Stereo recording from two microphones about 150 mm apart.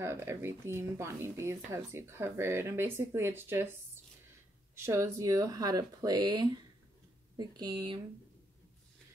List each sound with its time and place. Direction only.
0.0 s speech: 15° right (ahead or behind)